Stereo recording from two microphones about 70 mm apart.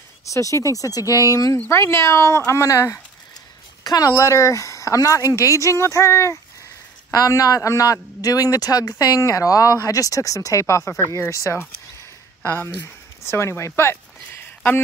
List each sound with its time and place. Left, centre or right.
0.3 s speech: left
1.7 s speech: left
3.8 s speech: left
4.2 s speech: left
7.1 s a man's voice: left
12.6 s speech: left